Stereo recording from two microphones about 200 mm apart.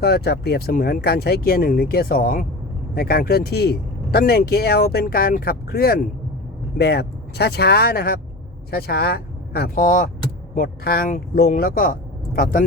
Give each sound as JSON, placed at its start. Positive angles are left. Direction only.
{"t": 0.0, "sound": "speech", "side_deg": 55}